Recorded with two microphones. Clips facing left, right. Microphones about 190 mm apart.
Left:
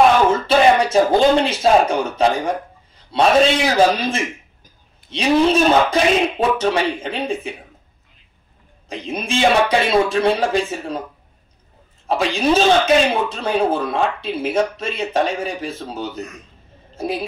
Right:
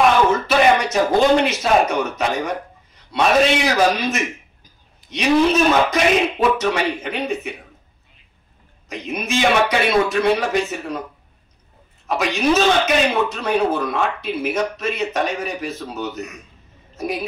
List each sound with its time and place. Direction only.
0.5 s speech: 30° left (ahead or behind)
8.8 s speech: 30° left (ahead or behind)
12.1 s a woman's voice: 30° left (ahead or behind)